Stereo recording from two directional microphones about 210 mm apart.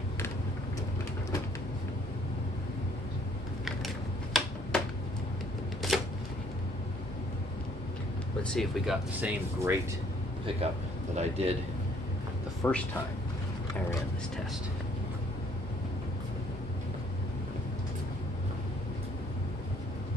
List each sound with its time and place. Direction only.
3.6 s a sound: centre (ahead or behind)
5.8 s camera: centre (ahead or behind)
8.4 s speech: 5° left (ahead or behind)
11.1 s a man's voice: 30° right (ahead or behind)
12.6 s speech: 5° left (ahead or behind)